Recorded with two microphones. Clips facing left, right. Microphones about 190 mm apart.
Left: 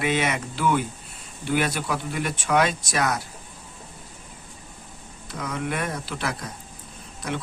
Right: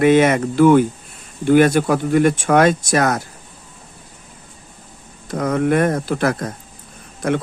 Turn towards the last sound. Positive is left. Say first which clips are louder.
# right 10 dB
turn(degrees=-55)  # may be behind; listen again after turning